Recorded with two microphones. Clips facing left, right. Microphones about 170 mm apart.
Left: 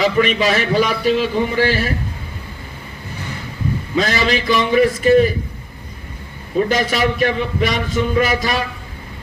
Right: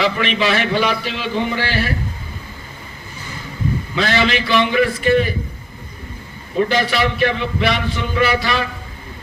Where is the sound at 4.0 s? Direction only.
40° left (ahead or behind).